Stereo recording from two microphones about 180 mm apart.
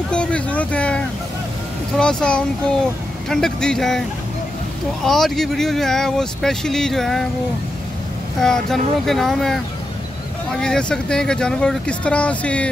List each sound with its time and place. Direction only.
0.1 s vehicle: 5° left (ahead or behind)
2.0 s speech: 5° left (ahead or behind)
5.0 s speech: centre (ahead or behind)
8.4 s speech: 5° left (ahead or behind)